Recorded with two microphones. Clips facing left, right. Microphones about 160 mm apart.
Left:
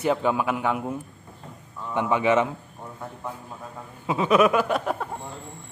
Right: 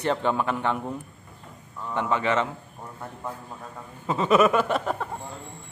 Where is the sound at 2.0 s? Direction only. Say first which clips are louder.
Left 3 dB; 15° left (ahead or behind).